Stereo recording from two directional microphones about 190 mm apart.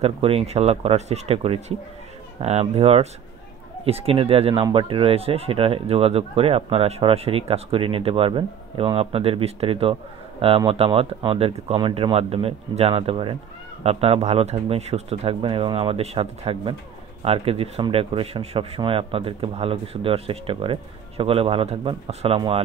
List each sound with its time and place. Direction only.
0.0 s speech: 30° right (ahead or behind)